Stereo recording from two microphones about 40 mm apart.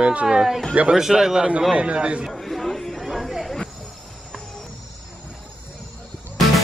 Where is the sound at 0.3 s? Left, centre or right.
Centre.